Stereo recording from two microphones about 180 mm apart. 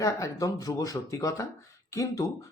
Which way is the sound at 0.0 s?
20° left (ahead or behind).